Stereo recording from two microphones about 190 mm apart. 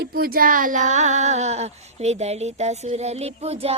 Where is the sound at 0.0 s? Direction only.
50° right (ahead or behind).